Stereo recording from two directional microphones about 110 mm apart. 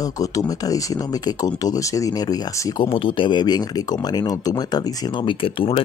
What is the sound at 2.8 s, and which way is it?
Speech, 50° left (ahead or behind).